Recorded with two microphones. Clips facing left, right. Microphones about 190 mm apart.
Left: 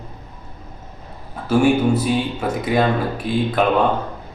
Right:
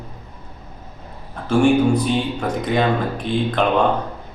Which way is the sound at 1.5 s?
5° left (ahead or behind).